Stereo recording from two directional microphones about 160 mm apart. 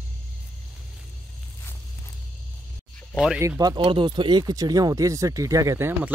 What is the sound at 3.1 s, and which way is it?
Speech, 5° right (ahead or behind).